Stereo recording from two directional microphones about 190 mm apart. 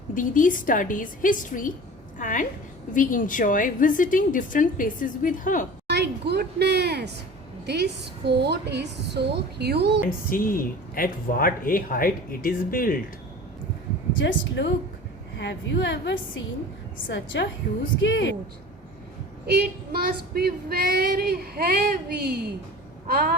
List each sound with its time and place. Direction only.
0.1 s a woman's voice: 45° left (ahead or behind)
5.9 s child singing: 60° right (ahead or behind)
10.2 s a woman's voice: 50° left (ahead or behind)
14.2 s a woman's voice: 75° left (ahead or behind)
19.5 s child singing: 55° right (ahead or behind)
23.0 s a sound: 55° right (ahead or behind)